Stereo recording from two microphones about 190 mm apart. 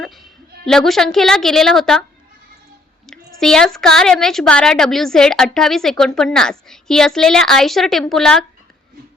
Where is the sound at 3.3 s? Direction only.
5° left (ahead or behind).